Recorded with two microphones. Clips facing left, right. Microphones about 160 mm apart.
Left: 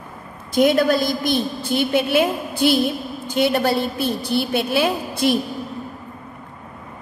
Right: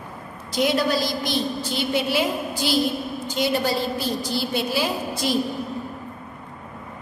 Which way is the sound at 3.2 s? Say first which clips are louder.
Left 5 dB; 60° left (ahead or behind).